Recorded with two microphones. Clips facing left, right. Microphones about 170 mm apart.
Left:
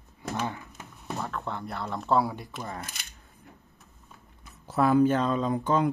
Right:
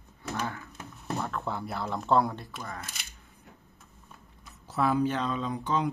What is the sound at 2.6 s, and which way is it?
Speech, 25° left (ahead or behind).